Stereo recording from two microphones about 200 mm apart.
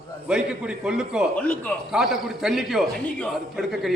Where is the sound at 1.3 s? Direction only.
10° left (ahead or behind).